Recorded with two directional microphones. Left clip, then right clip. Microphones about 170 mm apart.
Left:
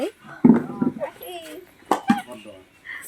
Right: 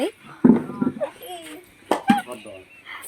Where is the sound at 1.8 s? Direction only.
5° right (ahead or behind).